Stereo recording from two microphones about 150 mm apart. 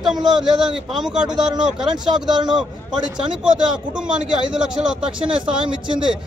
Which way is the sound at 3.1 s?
5° right (ahead or behind).